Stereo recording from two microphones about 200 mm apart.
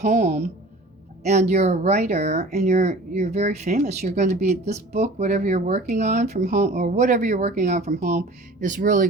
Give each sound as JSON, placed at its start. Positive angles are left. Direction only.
{"t": 0.0, "sound": "a woman's voice", "side_deg": -35}